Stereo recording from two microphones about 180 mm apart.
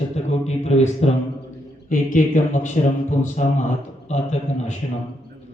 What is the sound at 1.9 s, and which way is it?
A man's voice, 50° left (ahead or behind).